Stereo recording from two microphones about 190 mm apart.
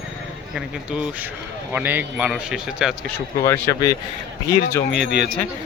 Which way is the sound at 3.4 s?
15° left (ahead or behind).